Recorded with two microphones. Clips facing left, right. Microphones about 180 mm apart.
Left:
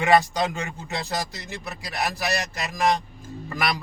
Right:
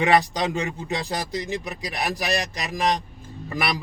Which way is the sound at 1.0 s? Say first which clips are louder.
Right 3 dB; 15° right (ahead or behind).